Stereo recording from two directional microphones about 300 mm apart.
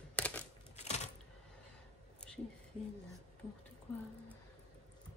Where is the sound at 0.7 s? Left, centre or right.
Left.